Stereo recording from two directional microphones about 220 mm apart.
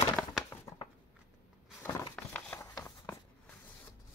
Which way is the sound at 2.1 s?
5° left (ahead or behind).